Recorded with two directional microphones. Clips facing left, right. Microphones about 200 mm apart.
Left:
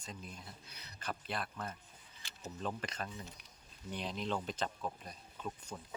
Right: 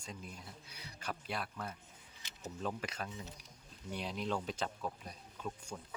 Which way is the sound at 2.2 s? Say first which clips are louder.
Even; 20° right (ahead or behind).